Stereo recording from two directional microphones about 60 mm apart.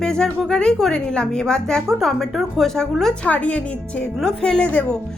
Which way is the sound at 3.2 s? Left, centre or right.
Left.